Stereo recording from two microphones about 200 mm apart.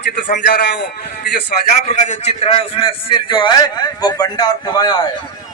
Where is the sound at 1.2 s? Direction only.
35° left (ahead or behind).